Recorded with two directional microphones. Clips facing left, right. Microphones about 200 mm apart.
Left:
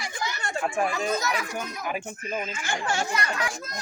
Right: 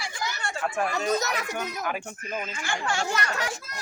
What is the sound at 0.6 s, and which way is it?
A child's voice, 10° left (ahead or behind).